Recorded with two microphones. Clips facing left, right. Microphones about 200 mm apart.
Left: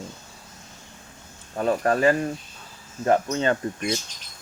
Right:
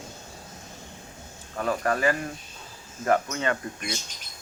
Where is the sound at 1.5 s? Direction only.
30° left (ahead or behind).